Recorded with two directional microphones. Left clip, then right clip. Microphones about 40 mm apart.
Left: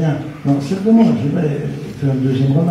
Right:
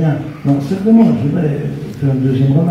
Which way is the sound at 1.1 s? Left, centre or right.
Centre.